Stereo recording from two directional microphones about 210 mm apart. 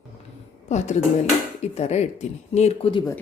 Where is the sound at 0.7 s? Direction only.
35° left (ahead or behind).